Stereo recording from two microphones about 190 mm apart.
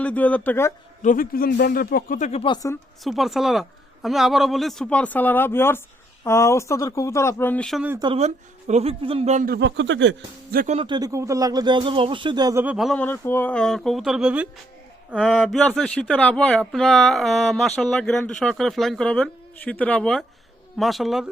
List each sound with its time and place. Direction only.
0.0 s speech: 10° left (ahead or behind)
1.0 s speech: 45° left (ahead or behind); by 2.6 s 30° left (ahead or behind)
3.0 s speech: centre (ahead or behind)
7.9 s a man's voice: 25° right (ahead or behind)
9.6 s speech: 70° right (ahead or behind)
10.5 s speech: 50° right (ahead or behind)
10.8 s speech: 25° right (ahead or behind)
12.6 s speech: centre (ahead or behind)